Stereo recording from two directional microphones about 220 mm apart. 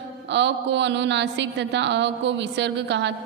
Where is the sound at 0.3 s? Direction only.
55° right (ahead or behind).